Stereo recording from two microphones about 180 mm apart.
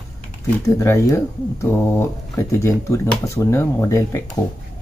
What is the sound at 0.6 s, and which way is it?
Speech, 15° left (ahead or behind).